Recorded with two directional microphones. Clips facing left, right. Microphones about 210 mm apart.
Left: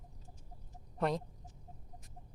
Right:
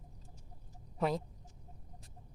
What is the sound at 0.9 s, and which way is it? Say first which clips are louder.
Speech: even; centre (ahead or behind).